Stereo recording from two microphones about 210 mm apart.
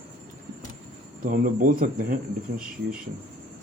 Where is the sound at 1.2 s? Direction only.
40° right (ahead or behind).